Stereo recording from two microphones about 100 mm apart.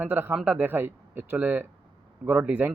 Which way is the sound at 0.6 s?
20° right (ahead or behind).